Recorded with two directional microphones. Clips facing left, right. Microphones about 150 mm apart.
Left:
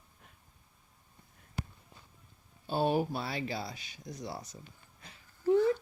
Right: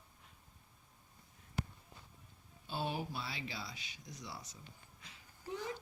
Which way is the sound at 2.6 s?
50° left (ahead or behind).